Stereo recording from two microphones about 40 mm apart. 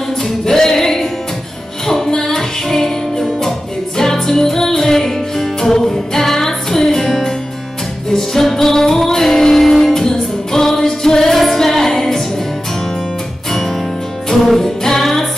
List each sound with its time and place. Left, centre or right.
0.5 s music: centre
14.3 s music: centre